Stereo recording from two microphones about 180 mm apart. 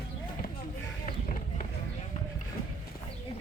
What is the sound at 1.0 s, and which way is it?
Run, 45° left (ahead or behind).